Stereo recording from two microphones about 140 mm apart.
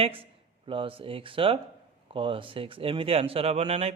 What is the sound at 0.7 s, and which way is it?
A man's voice, 40° right (ahead or behind).